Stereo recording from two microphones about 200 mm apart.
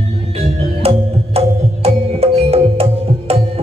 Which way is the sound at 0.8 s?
30° right (ahead or behind).